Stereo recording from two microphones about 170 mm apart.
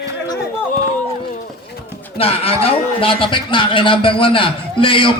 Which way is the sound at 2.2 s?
35° left (ahead or behind).